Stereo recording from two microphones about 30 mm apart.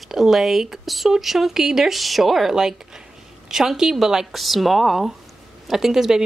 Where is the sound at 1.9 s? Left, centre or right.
Centre.